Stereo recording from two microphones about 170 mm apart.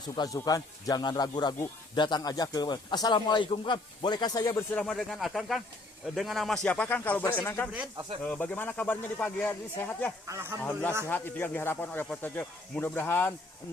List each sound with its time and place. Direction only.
0.2 s speech: 20° left (ahead or behind)
4.7 s speech: 5° left (ahead or behind)
10.2 s speech: 15° right (ahead or behind)
10.6 s speech: 10° left (ahead or behind)